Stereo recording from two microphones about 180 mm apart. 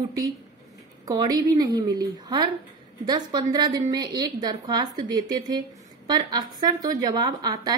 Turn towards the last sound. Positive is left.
turn(degrees=-20)  # may be behind; listen again after turning